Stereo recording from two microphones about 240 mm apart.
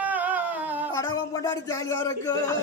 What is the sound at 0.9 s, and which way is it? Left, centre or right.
Speech, centre.